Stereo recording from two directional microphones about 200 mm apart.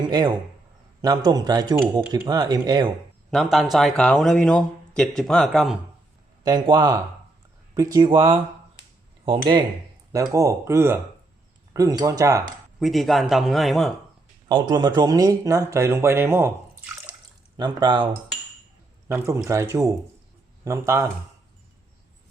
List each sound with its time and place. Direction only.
0.0 s a man's voice: 20° right (ahead or behind)
3.3 s a man's voice: centre (ahead or behind)
6.4 s speech: 20° right (ahead or behind)
12.8 s a man's voice: centre (ahead or behind)
14.4 s speech: 20° right (ahead or behind)
17.6 s speech: 20° right (ahead or behind)